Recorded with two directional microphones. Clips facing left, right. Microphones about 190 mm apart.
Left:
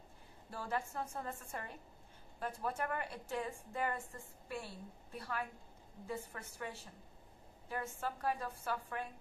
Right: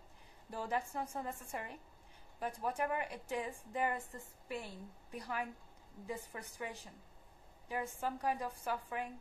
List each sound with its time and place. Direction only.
0.5 s a woman's voice: 15° right (ahead or behind)